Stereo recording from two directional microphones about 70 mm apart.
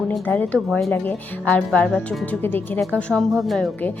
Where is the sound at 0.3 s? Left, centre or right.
Centre.